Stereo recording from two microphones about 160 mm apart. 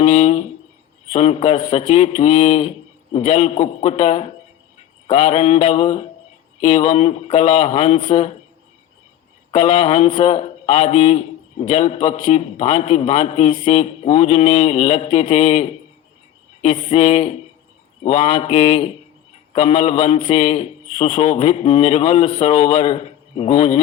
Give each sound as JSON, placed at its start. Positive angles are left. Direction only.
{"t": 0.0, "sound": "a man's voice", "side_deg": 45}
{"t": 2.6, "sound": "a man's voice", "side_deg": 40}
{"t": 9.7, "sound": "a man's voice", "side_deg": 40}
{"t": 16.9, "sound": "a man's voice", "side_deg": 45}
{"t": 18.3, "sound": "a man's voice", "side_deg": 35}